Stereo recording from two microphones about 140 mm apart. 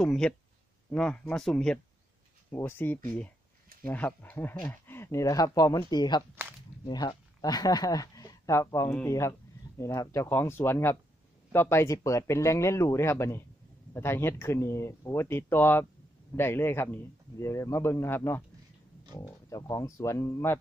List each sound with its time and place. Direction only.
0.0 s speech: 5° left (ahead or behind)
2.5 s a man's voice: 15° left (ahead or behind)